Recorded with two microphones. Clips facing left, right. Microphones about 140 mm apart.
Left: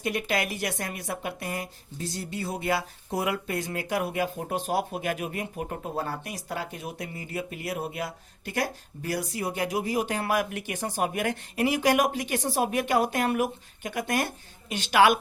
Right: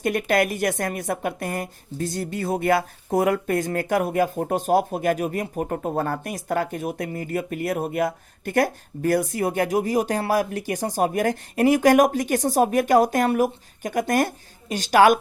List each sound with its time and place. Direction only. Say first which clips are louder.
0.0 s a woman's voice: right 7 dB; 50° right (ahead or behind)